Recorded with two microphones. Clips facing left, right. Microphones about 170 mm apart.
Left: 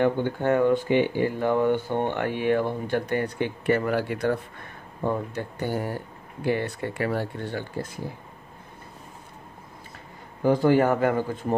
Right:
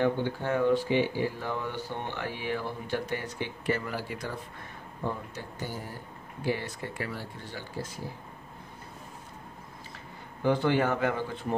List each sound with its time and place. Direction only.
0.0 s speech: 55° left (ahead or behind)
10.4 s a man's voice: 40° left (ahead or behind)